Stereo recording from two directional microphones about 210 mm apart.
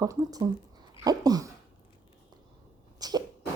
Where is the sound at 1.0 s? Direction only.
20° right (ahead or behind).